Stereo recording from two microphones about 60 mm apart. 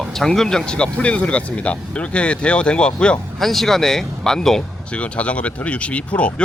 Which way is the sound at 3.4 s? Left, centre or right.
Centre.